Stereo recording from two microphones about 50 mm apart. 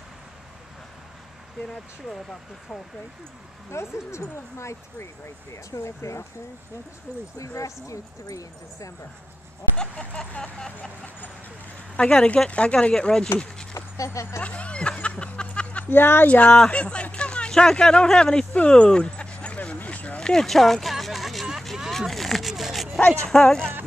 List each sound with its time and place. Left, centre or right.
3.7 s speech: left
5.5 s speech: left
7.3 s speech: left
9.8 s vehicle: centre
12.0 s speech: centre
12.9 s speech: centre
13.7 s a sound: left
14.4 s music: left
15.9 s a woman's voice: left
16.3 s speech: left
16.7 s a sound: left
20.2 s a sound: centre
23.2 s speech: centre